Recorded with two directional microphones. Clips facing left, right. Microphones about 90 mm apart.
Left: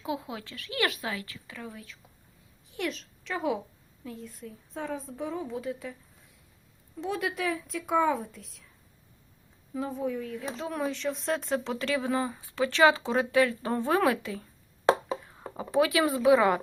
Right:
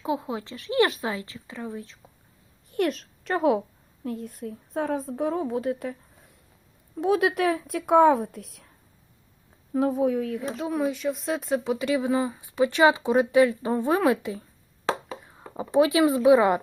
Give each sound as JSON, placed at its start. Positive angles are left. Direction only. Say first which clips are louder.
{"t": 0.0, "sound": "a woman's voice", "louder": "right 6 dB", "side_deg": -25}
{"t": 2.6, "sound": "a child's voice", "louder": "right 8 dB", "side_deg": -50}
{"t": 9.7, "sound": "speech", "louder": "right 9 dB", "side_deg": -60}
{"t": 10.7, "sound": "speech", "louder": "right 5 dB", "side_deg": -5}
{"t": 15.5, "sound": "a woman's voice", "louder": "right 5 dB", "side_deg": -20}